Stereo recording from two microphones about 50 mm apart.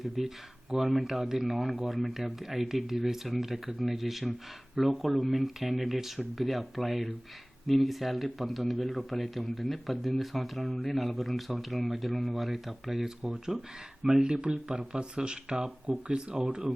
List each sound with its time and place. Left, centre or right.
0.2 s a man's voice: centre
14.0 s speech: centre